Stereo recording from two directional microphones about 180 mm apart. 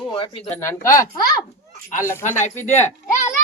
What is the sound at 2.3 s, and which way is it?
Speech, 40° left (ahead or behind).